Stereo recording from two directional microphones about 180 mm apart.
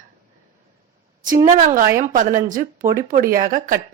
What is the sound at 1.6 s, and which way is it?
Speech, 45° right (ahead or behind).